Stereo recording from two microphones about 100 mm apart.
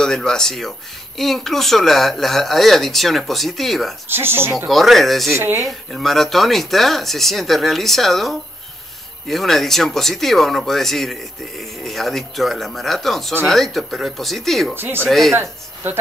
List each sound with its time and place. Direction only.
0.0 s speech: 5° left (ahead or behind)
4.1 s speech: 20° right (ahead or behind)
4.6 s speech: centre (ahead or behind)
5.3 s speech: 25° right (ahead or behind)
5.7 s speech: centre (ahead or behind)
14.8 s speech: 20° right (ahead or behind)
15.0 s speech: centre (ahead or behind)